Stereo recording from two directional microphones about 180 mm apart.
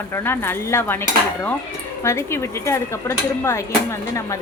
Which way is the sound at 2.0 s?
15° left (ahead or behind).